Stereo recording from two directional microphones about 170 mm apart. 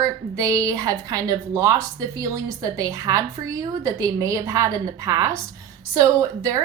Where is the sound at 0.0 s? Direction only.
20° right (ahead or behind).